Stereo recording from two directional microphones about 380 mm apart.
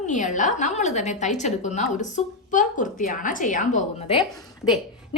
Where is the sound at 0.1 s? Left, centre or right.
Centre.